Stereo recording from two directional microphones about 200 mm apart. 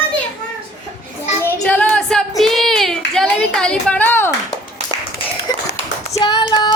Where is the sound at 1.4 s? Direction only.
5° left (ahead or behind).